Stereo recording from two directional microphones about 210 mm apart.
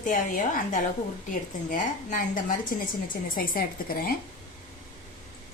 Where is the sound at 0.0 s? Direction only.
40° left (ahead or behind).